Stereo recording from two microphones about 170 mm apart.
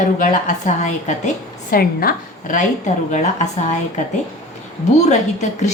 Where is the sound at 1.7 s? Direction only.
60° left (ahead or behind); by 5.7 s 45° left (ahead or behind).